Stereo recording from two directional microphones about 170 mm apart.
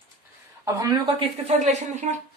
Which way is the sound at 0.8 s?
20° right (ahead or behind).